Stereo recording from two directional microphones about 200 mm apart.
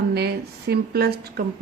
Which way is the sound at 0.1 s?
55° right (ahead or behind).